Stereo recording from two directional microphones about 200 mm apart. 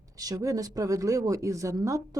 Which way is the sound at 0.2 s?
15° right (ahead or behind).